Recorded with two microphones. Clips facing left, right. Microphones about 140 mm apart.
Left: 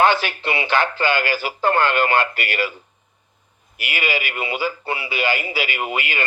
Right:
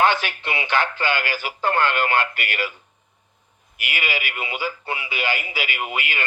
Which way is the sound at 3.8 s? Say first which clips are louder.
Left 3 dB; 35° left (ahead or behind).